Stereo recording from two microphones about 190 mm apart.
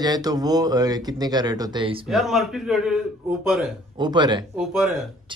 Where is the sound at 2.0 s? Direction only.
Centre (ahead or behind).